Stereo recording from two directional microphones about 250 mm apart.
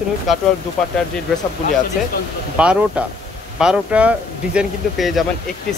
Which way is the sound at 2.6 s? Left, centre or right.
Centre.